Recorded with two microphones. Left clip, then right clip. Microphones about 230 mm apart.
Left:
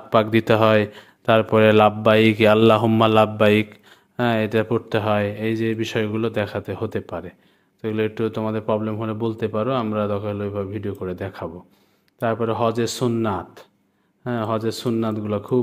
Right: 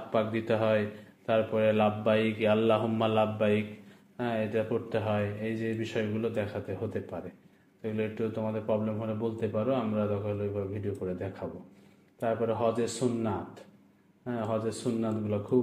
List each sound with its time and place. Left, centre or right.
0.1 s a man's voice: left